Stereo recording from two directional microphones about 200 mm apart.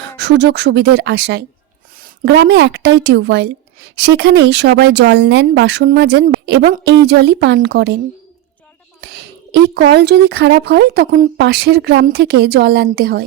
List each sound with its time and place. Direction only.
0.2 s speech: 60° right (ahead or behind)
9.0 s speech: 55° right (ahead or behind)
11.3 s a woman's voice: 55° right (ahead or behind)